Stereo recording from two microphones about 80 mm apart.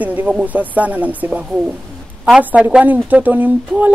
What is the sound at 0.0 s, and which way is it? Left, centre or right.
Speech, centre.